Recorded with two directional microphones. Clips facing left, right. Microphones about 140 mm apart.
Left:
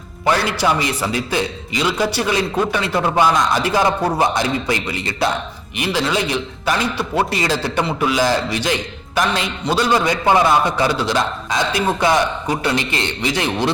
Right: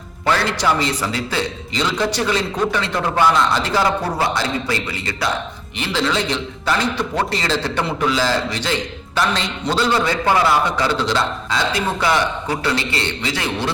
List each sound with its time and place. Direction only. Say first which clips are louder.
0.3 s a man's voice: left 1 dB; 15° left (ahead or behind)